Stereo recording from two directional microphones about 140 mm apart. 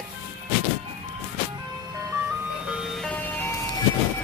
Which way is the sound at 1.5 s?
25° right (ahead or behind).